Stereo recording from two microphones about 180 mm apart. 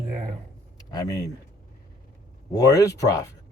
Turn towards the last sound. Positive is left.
turn(degrees=20)  # may be behind; listen again after turning